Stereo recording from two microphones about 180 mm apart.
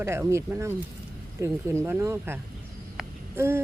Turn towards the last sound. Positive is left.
turn(degrees=-15)  # may be behind; listen again after turning